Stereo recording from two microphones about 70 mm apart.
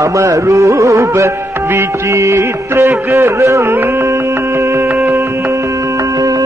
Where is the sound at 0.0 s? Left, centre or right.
Right.